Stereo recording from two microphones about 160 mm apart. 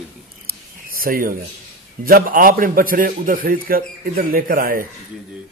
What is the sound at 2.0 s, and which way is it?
A man's voice, 65° right (ahead or behind).